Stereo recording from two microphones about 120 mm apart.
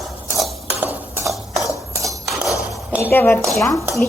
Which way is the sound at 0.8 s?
15° right (ahead or behind).